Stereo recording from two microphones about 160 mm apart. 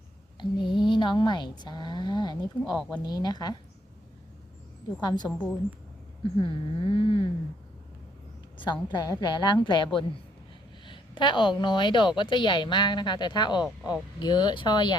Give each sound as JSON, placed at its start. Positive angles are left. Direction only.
{"t": 0.3, "sound": "a woman's voice", "side_deg": 30}
{"t": 4.9, "sound": "a woman's voice", "side_deg": 25}
{"t": 6.3, "sound": "speech", "side_deg": 30}
{"t": 8.5, "sound": "a woman's voice", "side_deg": 30}